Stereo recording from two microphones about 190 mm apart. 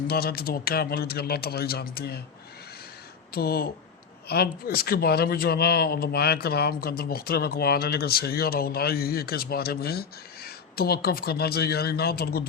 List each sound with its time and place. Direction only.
0.1 s speech: 55° left (ahead or behind)
3.3 s speech: 55° left (ahead or behind)